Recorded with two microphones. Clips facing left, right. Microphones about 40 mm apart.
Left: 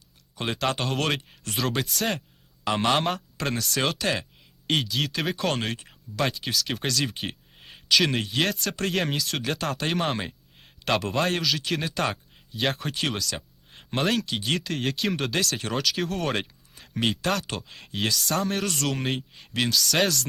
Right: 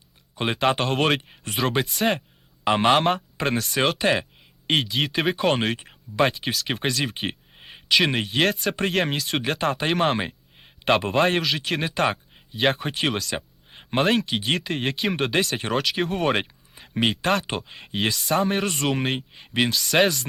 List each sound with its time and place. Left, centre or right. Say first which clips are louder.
0.3 s speech: right 5 dB; right
8.9 s speech: right 1 dB; centre
9.2 s speech: right 4 dB; right
11.6 s speech: right 2 dB; centre
11.9 s speech: right 4 dB; right